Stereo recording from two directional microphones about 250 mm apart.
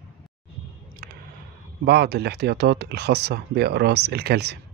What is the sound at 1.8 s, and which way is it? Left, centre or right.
Speech, right.